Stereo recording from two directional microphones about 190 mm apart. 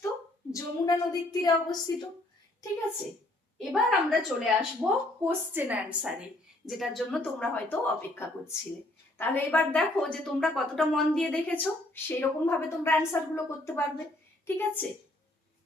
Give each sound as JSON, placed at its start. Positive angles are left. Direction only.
{"t": 0.5, "sound": "a woman's voice", "side_deg": 20}
{"t": 3.6, "sound": "a woman's voice", "side_deg": 0}